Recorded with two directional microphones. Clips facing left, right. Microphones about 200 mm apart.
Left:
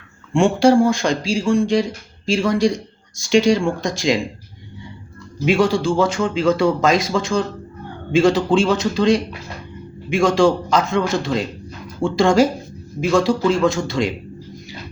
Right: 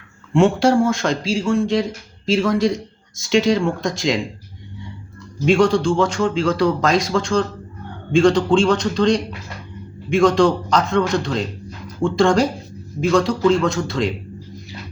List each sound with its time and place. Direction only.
0.3 s speech: centre (ahead or behind)
5.5 s speech: 5° left (ahead or behind)